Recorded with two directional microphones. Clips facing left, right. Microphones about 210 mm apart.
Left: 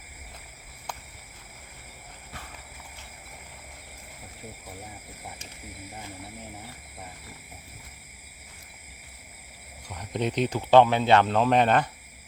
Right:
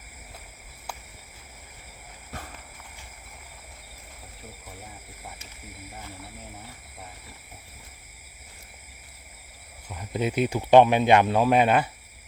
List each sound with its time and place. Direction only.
9.9 s speech: 5° right (ahead or behind)